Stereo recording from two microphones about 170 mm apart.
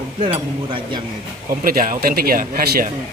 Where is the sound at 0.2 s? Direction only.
30° right (ahead or behind).